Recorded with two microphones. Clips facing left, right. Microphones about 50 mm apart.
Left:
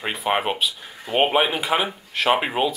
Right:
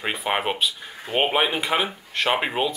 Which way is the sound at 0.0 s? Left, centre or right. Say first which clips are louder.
Left 2 dB; centre.